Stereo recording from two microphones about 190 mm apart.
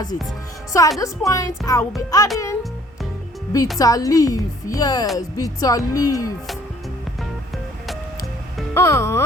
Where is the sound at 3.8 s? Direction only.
20° left (ahead or behind).